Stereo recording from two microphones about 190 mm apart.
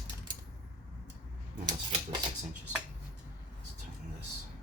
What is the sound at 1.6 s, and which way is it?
Typewriter, 25° right (ahead or behind).